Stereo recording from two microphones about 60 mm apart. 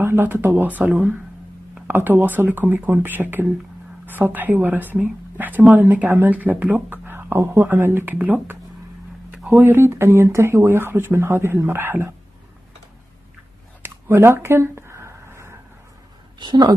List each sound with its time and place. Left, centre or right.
0.0 s speech: right
1.9 s speech: right
9.3 s a sound: centre
9.6 s speech: right
9.8 s speech: right
13.8 s a sound: right